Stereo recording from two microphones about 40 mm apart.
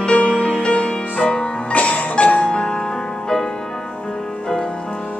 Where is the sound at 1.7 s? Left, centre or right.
Left.